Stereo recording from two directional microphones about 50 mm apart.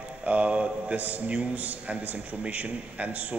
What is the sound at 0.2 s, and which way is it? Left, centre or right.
A man's voice, right.